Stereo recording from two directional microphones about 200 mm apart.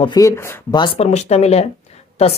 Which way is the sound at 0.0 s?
20° left (ahead or behind).